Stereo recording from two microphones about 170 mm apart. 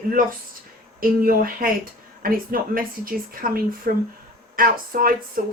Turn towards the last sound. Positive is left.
turn(degrees=-55)  # may be behind; listen again after turning